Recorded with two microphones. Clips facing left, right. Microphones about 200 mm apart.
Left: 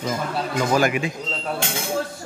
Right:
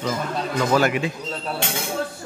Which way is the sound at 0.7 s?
15° left (ahead or behind).